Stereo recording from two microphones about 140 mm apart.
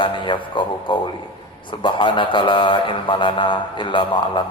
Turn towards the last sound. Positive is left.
turn(degrees=35)  # may be behind; listen again after turning